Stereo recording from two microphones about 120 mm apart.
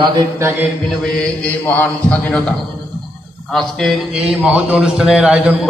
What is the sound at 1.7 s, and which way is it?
Speech, 15° left (ahead or behind).